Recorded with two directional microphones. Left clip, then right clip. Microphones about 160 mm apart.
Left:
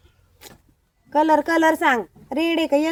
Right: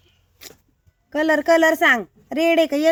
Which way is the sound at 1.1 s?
35° right (ahead or behind).